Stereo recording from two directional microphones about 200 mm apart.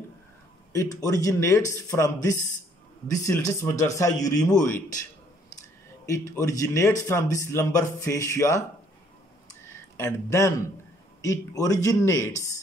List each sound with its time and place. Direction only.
0.7 s speech: 15° left (ahead or behind)
6.0 s speech: 15° left (ahead or behind)
9.7 s speech: 15° left (ahead or behind)